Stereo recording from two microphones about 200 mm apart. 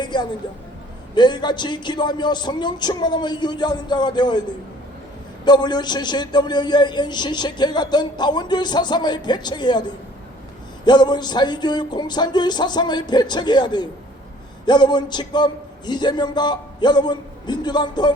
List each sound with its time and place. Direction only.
0.0 s a sound: 20° left (ahead or behind)
1.1 s a man's voice: 20° left (ahead or behind)
5.5 s a man's voice: 20° left (ahead or behind)
10.8 s a man's voice: 20° left (ahead or behind)